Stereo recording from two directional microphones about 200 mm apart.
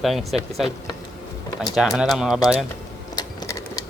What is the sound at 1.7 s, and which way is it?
Speech, centre (ahead or behind).